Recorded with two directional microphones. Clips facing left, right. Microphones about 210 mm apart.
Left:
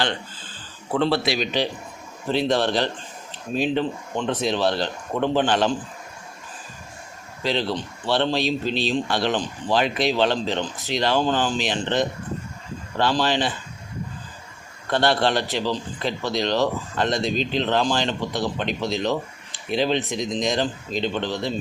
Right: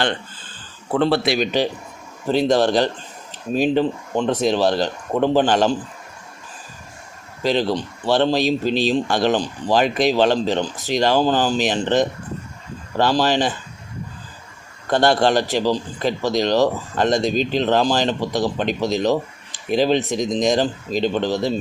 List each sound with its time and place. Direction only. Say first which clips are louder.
0.9 s a man's voice: right 4 dB; 50° right (ahead or behind)
7.4 s a man's voice: right 5 dB; 45° right (ahead or behind)
14.8 s a man's voice: right 4 dB; 45° right (ahead or behind)